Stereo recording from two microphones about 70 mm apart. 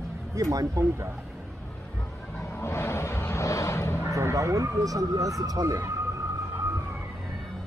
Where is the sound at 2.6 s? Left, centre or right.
Left.